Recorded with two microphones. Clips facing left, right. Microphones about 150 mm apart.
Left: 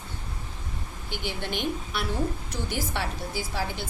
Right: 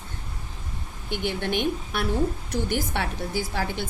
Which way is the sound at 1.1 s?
55° right (ahead or behind).